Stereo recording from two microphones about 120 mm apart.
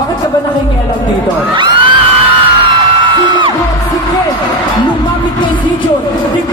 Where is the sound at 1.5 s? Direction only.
45° right (ahead or behind).